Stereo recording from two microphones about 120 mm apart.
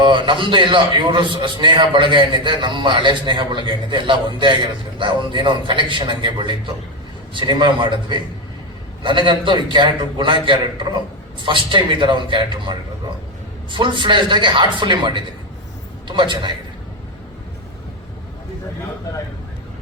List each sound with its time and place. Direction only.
0.0 s a man's voice: 40° right (ahead or behind)